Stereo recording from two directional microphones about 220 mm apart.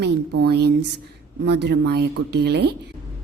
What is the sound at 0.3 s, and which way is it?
A woman's voice, 50° right (ahead or behind).